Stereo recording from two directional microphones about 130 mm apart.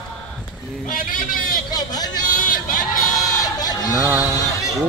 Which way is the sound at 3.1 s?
25° left (ahead or behind).